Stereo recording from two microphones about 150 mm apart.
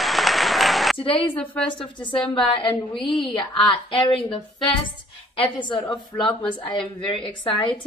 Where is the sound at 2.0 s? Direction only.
35° left (ahead or behind).